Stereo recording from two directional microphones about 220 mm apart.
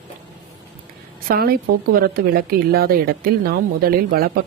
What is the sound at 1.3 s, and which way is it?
Speech, 45° right (ahead or behind).